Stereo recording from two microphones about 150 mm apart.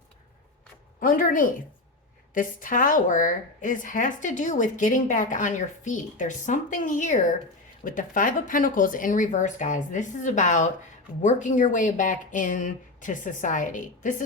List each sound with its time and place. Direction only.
0.9 s a woman's voice: 65° left (ahead or behind)